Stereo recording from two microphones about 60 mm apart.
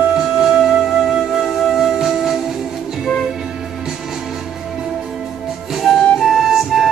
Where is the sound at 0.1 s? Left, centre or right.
Centre.